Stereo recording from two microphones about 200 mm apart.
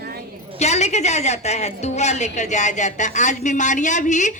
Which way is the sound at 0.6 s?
35° left (ahead or behind).